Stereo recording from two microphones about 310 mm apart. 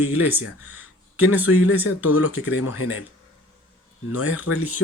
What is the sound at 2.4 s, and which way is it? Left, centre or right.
Speech, left.